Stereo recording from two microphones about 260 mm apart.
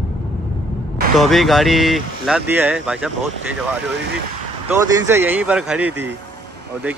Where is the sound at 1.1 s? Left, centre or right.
Centre.